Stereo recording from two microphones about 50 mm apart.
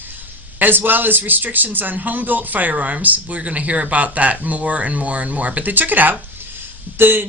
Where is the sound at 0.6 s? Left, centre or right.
Right.